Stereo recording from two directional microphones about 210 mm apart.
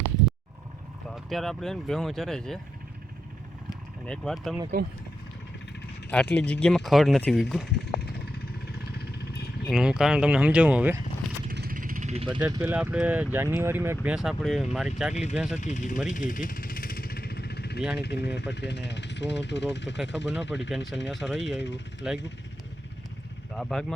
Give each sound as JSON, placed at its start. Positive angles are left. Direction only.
{"t": 1.0, "sound": "speech", "side_deg": 0}
{"t": 4.0, "sound": "speech", "side_deg": 5}
{"t": 4.7, "sound": "speech", "side_deg": -40}
{"t": 6.1, "sound": "speech", "side_deg": 5}
{"t": 9.0, "sound": "vehicle", "side_deg": 50}
{"t": 9.6, "sound": "speech", "side_deg": -5}
{"t": 11.4, "sound": "vehicle", "side_deg": -45}
{"t": 12.4, "sound": "speech", "side_deg": -15}
{"t": 15.1, "sound": "speech", "side_deg": 30}
{"t": 15.4, "sound": "speech", "side_deg": -5}
{"t": 15.6, "sound": "speech", "side_deg": 35}
{"t": 16.0, "sound": "vehicle", "side_deg": 40}
{"t": 17.9, "sound": "speech", "side_deg": 50}
{"t": 23.6, "sound": "speech", "side_deg": 0}